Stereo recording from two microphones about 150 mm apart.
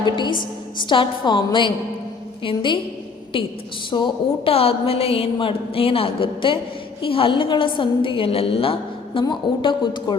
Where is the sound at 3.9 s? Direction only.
35° left (ahead or behind).